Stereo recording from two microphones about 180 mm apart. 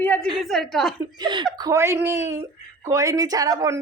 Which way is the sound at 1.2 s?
25° right (ahead or behind).